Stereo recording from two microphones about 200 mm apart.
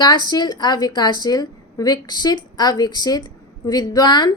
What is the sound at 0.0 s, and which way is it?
A woman's voice, 20° left (ahead or behind).